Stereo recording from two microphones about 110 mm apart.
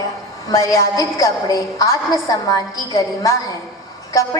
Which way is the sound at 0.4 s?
30° left (ahead or behind).